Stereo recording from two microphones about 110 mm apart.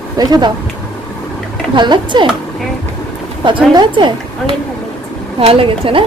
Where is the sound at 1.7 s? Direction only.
45° right (ahead or behind).